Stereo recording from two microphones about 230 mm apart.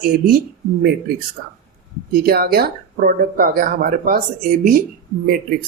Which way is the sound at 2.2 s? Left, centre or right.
Right.